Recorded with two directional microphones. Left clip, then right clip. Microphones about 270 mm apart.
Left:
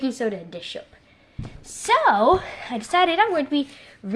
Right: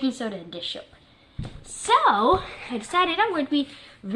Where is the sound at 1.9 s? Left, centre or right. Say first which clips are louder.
Left 2 dB; left.